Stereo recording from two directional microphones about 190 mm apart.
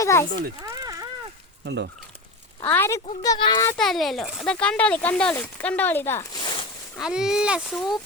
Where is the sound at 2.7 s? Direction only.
10° left (ahead or behind).